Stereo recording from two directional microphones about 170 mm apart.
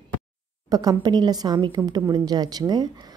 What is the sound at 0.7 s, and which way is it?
A woman's voice, 25° right (ahead or behind).